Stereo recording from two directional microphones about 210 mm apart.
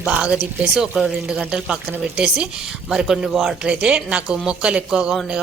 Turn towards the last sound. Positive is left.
turn(degrees=-5)  # may be behind; listen again after turning